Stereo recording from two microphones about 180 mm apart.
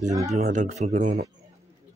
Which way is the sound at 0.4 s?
40° right (ahead or behind).